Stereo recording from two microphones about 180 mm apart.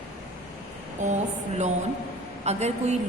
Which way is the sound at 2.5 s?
40° right (ahead or behind).